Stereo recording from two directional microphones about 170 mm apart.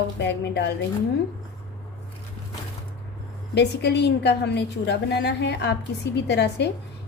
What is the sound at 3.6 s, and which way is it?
A woman's voice, 75° left (ahead or behind).